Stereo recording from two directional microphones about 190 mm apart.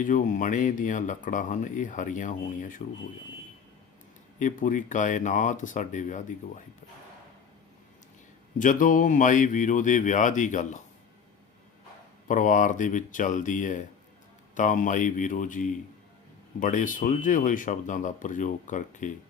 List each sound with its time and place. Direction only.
0.0 s speech: 45° left (ahead or behind)
4.4 s speech: 40° left (ahead or behind)
8.5 s speech: 45° left (ahead or behind)
12.3 s speech: 45° left (ahead or behind)